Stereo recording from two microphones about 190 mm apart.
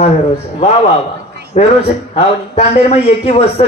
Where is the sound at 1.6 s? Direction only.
35° left (ahead or behind).